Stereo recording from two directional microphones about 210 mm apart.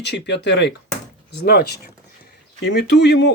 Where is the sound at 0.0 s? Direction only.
55° left (ahead or behind).